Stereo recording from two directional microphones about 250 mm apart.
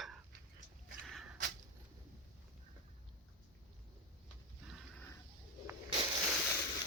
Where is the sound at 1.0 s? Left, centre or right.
Centre.